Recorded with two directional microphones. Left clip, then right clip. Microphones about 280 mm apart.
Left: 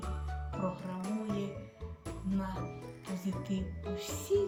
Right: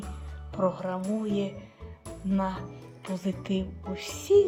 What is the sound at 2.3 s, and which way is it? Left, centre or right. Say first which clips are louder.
Music: right 10 dB; centre.